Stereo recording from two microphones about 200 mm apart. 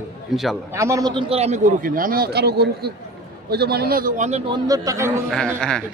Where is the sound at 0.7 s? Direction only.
15° right (ahead or behind); by 4.4 s 40° right (ahead or behind).